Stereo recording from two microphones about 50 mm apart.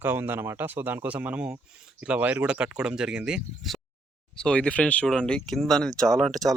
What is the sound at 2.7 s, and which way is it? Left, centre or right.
Speech, centre.